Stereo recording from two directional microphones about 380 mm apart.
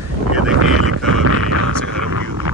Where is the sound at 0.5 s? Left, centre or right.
Right.